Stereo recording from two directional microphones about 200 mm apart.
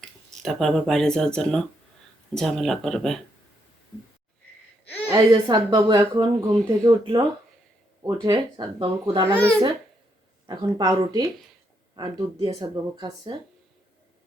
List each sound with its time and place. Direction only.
0.0 s speech: centre (ahead or behind)
5.0 s speech: 20° right (ahead or behind)
10.4 s speech: 20° right (ahead or behind)